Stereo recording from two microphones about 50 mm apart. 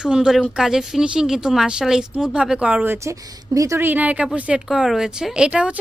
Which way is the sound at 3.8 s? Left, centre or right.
Right.